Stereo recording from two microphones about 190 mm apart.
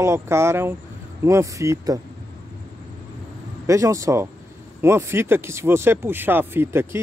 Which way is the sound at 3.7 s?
15° right (ahead or behind).